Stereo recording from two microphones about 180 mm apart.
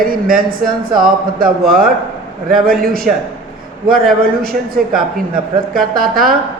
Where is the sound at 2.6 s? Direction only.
55° right (ahead or behind).